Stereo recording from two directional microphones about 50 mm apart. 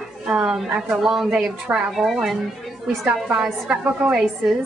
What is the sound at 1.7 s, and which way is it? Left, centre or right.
Speech, right.